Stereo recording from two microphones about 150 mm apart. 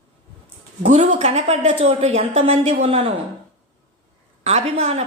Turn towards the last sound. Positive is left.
turn(degrees=-45)  # may be behind; listen again after turning